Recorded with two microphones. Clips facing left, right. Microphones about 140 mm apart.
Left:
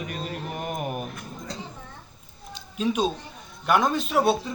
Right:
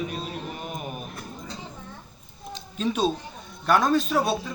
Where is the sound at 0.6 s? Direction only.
70° left (ahead or behind).